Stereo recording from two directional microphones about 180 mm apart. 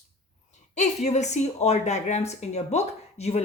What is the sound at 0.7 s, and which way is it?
Speech, 40° left (ahead or behind).